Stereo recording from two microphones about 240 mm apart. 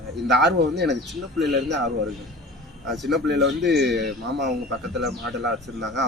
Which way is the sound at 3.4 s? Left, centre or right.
Right.